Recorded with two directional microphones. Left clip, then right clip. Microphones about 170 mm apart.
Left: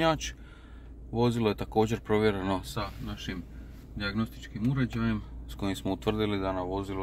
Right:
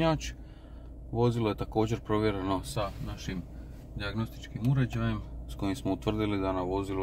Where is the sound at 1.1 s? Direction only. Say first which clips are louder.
Left 1 dB; 20° left (ahead or behind).